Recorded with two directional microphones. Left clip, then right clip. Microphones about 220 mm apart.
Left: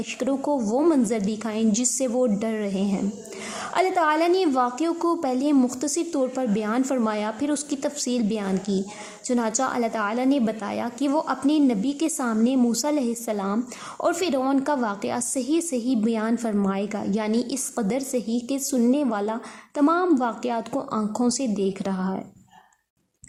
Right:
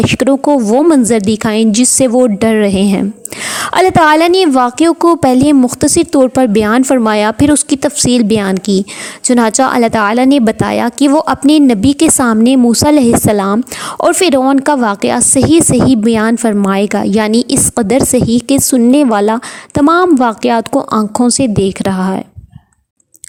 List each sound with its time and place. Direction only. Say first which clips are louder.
0.0 s speech: right 16 dB; 40° right (ahead or behind)